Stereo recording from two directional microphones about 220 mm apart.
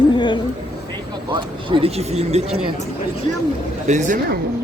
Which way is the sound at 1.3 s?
25° right (ahead or behind).